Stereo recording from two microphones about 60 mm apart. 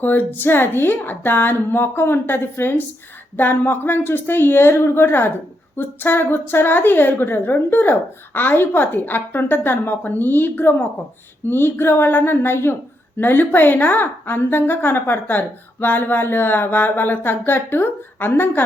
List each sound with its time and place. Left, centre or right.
0.0 s a woman's voice: left